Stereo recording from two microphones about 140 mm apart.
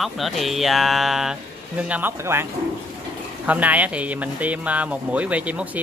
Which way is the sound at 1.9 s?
15° right (ahead or behind).